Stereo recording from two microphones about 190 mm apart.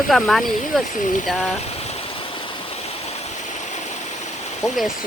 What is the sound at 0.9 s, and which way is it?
Speech, 40° left (ahead or behind).